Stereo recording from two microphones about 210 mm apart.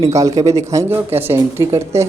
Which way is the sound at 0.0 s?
15° right (ahead or behind).